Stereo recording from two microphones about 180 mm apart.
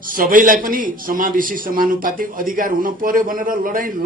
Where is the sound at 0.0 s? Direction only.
50° right (ahead or behind).